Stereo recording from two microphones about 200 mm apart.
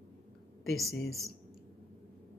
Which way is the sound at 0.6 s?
Centre (ahead or behind).